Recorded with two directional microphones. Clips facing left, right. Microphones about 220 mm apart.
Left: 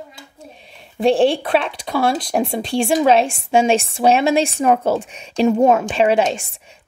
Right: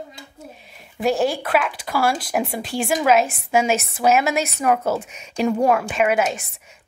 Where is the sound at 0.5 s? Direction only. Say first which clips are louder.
Left 6 dB; 25° left (ahead or behind).